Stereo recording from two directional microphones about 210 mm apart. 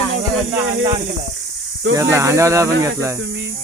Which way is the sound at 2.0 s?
15° right (ahead or behind).